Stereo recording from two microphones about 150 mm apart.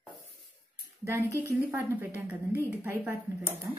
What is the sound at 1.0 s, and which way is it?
Speech, 20° right (ahead or behind).